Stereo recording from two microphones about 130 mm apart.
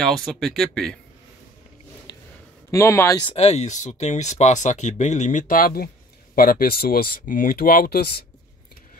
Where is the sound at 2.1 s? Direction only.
35° left (ahead or behind).